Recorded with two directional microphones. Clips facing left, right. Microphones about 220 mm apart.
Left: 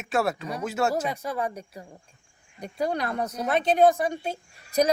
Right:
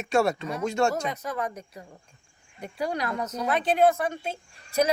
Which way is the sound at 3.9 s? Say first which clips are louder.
Left 2 dB; 15° left (ahead or behind).